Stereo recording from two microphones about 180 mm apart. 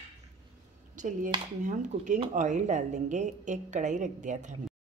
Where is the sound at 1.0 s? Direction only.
45° right (ahead or behind).